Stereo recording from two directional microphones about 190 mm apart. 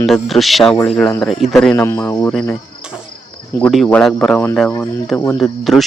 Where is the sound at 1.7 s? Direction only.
15° left (ahead or behind).